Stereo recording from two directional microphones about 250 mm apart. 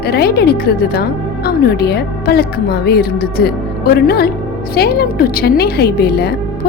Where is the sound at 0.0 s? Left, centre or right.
Left.